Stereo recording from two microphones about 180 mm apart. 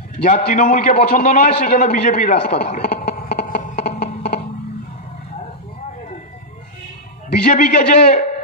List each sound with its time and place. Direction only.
0.5 s a man's voice: 50° left (ahead or behind)
7.4 s a man's voice: 45° left (ahead or behind)